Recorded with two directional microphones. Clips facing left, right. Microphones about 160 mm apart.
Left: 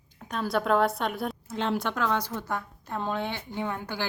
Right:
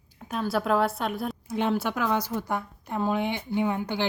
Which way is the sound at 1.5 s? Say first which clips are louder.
Right 4 dB; 10° right (ahead or behind).